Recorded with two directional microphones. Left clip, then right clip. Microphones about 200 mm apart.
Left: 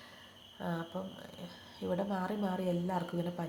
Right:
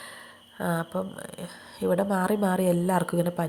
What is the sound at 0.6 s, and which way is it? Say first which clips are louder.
A woman's voice: right 11 dB; 40° right (ahead or behind).